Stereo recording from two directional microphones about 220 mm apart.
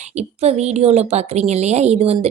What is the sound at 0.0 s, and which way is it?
A woman's voice, 30° right (ahead or behind).